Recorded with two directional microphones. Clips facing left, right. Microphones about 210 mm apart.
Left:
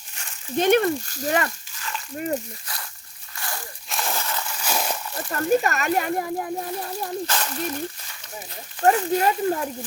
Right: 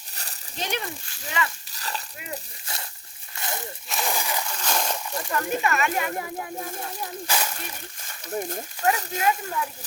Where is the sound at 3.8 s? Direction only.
Centre (ahead or behind).